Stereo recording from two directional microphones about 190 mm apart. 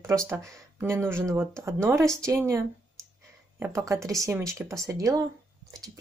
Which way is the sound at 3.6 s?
15° right (ahead or behind).